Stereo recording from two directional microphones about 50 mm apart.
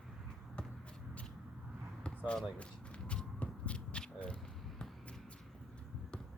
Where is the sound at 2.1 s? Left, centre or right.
Left.